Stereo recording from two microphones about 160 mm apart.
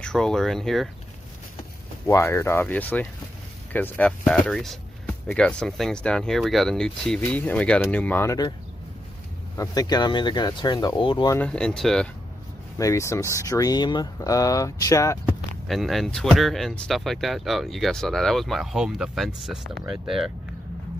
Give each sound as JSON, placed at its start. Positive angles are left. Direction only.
{"t": 0.0, "sound": "speech", "side_deg": 5}
{"t": 2.0, "sound": "speech", "side_deg": 15}
{"t": 9.6, "sound": "speech", "side_deg": 25}
{"t": 11.3, "sound": "speech", "side_deg": 5}
{"t": 12.7, "sound": "speech", "side_deg": 20}
{"t": 15.7, "sound": "speech", "side_deg": 0}